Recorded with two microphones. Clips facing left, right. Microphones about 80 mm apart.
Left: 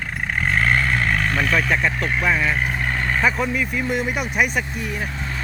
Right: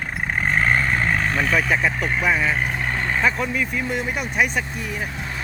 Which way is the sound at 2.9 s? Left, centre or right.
Centre.